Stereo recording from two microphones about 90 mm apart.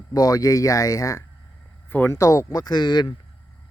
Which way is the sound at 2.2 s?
40° left (ahead or behind).